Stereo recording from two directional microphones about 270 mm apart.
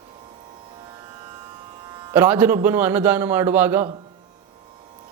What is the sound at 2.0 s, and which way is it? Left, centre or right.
Speech, centre.